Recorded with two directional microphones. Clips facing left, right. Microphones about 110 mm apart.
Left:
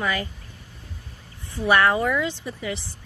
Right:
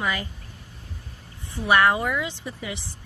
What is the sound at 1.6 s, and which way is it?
A woman's voice, 15° right (ahead or behind).